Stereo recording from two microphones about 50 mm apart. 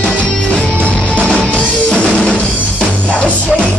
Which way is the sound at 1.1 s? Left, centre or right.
Left.